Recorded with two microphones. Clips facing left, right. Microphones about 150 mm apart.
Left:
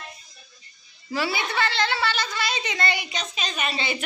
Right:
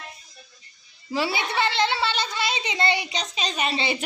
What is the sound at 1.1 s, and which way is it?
A woman's voice, 25° right (ahead or behind).